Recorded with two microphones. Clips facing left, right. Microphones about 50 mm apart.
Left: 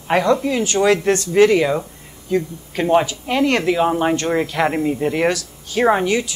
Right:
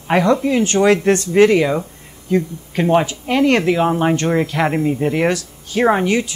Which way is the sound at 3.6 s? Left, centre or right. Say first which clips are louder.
Right 1 dB; centre.